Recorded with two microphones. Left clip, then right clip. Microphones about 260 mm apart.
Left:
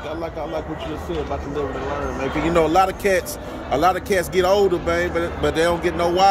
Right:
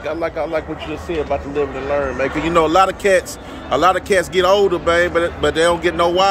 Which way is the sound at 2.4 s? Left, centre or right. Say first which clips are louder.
Right 3 dB; centre.